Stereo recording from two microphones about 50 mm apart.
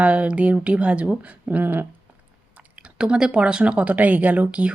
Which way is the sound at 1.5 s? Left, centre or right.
Right.